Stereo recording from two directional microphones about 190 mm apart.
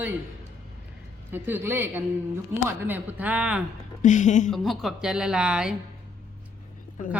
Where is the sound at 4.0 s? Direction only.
40° left (ahead or behind).